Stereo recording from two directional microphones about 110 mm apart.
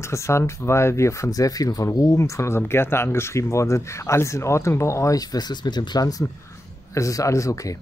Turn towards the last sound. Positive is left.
turn(degrees=30)  # may be behind; listen again after turning